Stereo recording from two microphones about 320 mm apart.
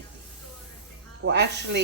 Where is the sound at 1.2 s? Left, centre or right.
Right.